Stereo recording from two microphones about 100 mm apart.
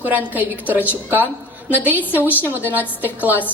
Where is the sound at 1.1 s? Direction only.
20° right (ahead or behind).